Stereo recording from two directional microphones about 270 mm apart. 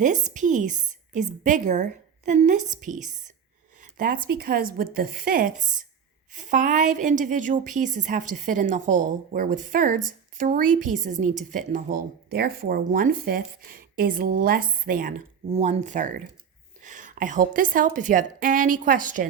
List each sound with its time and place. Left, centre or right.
0.0 s a woman's voice: right